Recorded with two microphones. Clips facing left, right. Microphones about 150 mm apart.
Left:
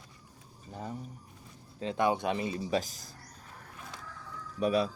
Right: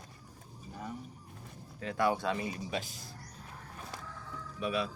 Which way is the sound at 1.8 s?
20° left (ahead or behind).